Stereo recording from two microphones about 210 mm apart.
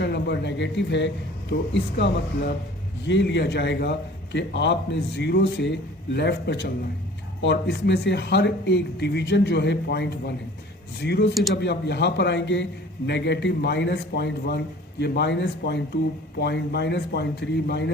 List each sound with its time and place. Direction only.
0.0 s a man's voice: 55° left (ahead or behind)